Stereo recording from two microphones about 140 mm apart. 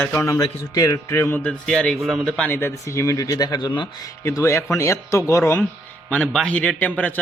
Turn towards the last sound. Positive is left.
turn(degrees=10)  # may be behind; listen again after turning